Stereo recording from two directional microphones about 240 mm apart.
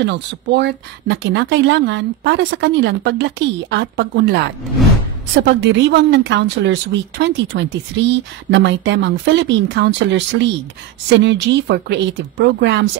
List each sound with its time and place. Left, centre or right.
0.0 s a woman's voice: right